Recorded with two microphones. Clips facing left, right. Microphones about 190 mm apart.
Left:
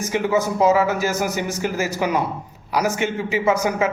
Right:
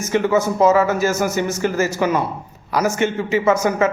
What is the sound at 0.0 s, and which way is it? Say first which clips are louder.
A man's voice: right 3 dB; 10° left (ahead or behind).